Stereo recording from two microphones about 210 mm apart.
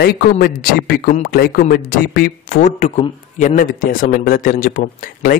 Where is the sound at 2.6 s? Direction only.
35° left (ahead or behind).